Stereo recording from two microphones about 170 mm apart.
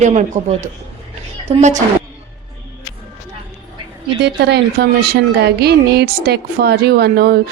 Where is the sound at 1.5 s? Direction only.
45° right (ahead or behind).